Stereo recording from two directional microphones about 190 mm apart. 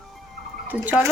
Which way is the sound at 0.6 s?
10° right (ahead or behind).